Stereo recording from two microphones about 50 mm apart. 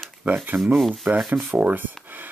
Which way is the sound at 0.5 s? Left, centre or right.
Right.